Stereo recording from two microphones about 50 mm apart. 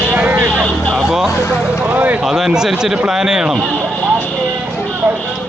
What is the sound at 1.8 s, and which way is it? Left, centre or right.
Speech, right.